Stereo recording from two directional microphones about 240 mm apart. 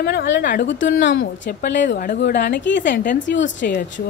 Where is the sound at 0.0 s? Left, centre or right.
Left.